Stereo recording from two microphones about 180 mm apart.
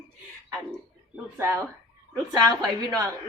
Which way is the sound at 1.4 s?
15° right (ahead or behind).